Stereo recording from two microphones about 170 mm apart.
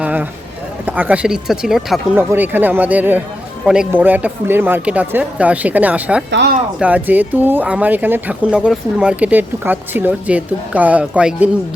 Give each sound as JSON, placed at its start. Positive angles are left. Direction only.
{"t": 0.0, "sound": "a sound", "side_deg": -10}
{"t": 0.9, "sound": "speech", "side_deg": -10}
{"t": 6.3, "sound": "speech", "side_deg": -80}
{"t": 6.7, "sound": "speech", "side_deg": -10}